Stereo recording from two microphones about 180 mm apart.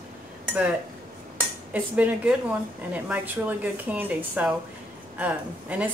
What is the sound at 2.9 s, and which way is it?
A woman's voice, 10° right (ahead or behind).